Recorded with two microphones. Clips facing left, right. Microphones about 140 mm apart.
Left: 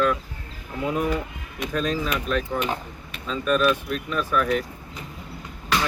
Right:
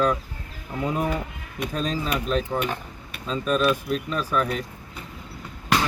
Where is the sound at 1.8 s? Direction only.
30° right (ahead or behind).